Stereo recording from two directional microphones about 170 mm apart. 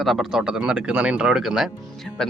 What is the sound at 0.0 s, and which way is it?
Speech, centre (ahead or behind).